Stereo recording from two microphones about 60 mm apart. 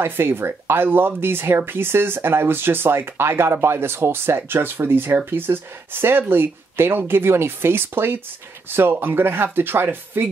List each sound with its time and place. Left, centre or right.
0.0 s speech: right